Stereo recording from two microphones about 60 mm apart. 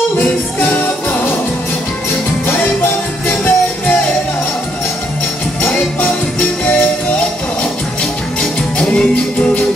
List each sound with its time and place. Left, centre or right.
0.2 s music: left
2.4 s music: left
5.9 s music: left
8.0 s music: centre